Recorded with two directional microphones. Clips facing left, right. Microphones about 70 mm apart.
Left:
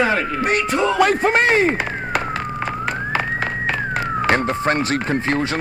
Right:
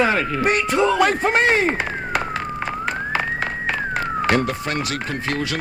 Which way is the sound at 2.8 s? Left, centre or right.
Left.